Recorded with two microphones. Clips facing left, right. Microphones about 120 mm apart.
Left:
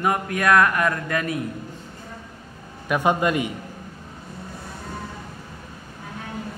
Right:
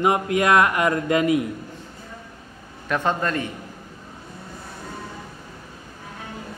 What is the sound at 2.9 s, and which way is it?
Speech, 10° left (ahead or behind).